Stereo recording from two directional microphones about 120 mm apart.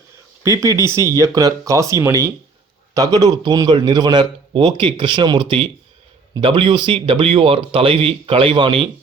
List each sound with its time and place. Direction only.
0.4 s a man's voice: 25° right (ahead or behind); by 8.9 s 45° right (ahead or behind)